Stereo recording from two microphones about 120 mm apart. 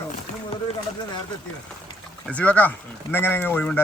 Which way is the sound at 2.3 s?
10° left (ahead or behind).